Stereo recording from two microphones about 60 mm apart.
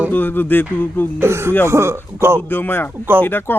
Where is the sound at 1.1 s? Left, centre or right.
Right.